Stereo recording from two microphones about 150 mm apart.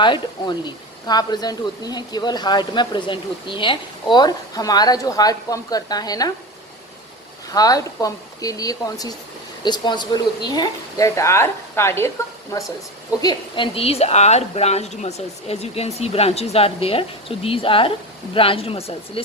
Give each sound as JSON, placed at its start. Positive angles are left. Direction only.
{"t": 0.0, "sound": "speech", "side_deg": 30}
{"t": 7.5, "sound": "speech", "side_deg": 25}
{"t": 13.7, "sound": "speech", "side_deg": 40}